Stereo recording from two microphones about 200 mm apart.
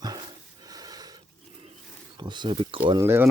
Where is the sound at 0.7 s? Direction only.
20° right (ahead or behind).